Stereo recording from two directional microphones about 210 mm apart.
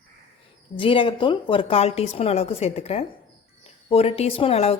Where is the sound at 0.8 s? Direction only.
25° left (ahead or behind).